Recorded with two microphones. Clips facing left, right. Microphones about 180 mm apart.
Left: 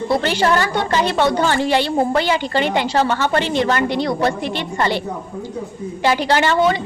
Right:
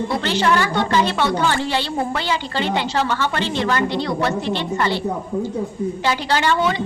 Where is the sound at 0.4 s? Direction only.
40° left (ahead or behind).